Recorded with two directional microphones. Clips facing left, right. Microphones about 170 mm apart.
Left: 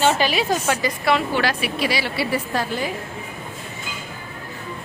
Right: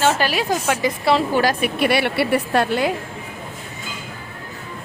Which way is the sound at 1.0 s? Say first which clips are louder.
Right 3 dB; 30° right (ahead or behind).